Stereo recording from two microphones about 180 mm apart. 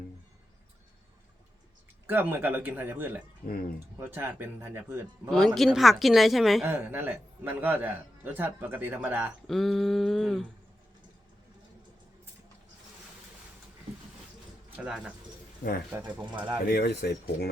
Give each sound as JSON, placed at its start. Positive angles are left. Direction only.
{"t": 2.0, "sound": "speech", "side_deg": -10}
{"t": 3.4, "sound": "speech", "side_deg": 55}
{"t": 3.9, "sound": "speech", "side_deg": -10}
{"t": 5.3, "sound": "speech", "side_deg": 0}
{"t": 9.5, "sound": "a sound", "side_deg": 0}
{"t": 14.8, "sound": "a sound", "side_deg": -5}
{"t": 15.9, "sound": "speech", "side_deg": -10}
{"t": 16.6, "sound": "speech", "side_deg": 60}